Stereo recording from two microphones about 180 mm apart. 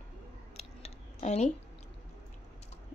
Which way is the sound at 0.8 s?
40° left (ahead or behind).